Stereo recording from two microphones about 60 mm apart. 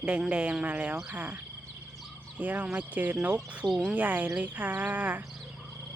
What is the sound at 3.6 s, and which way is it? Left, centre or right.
Speech, centre.